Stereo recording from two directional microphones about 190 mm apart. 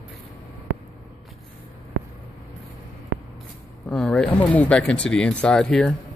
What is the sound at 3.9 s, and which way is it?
Speech, 5° left (ahead or behind).